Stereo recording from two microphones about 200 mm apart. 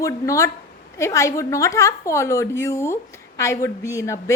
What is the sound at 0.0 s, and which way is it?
A woman's voice, 15° left (ahead or behind).